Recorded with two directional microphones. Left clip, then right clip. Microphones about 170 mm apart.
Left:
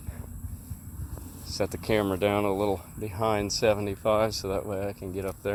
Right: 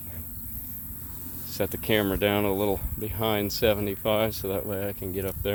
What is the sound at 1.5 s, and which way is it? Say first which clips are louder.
Speech: right 1 dB; 25° right (ahead or behind).